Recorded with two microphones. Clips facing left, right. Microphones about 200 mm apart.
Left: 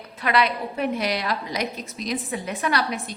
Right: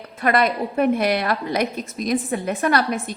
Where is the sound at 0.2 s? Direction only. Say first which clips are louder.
Right 4 dB; 50° right (ahead or behind).